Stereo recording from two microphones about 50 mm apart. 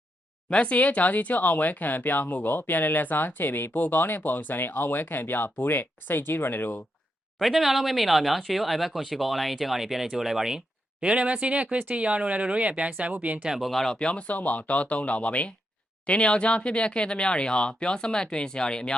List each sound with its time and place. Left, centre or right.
0.5 s speech: left
7.3 s speech: centre
11.0 s speech: right
13.6 s speech: centre
14.0 s speech: left